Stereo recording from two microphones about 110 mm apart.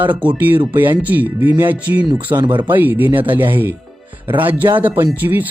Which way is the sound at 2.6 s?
20° right (ahead or behind).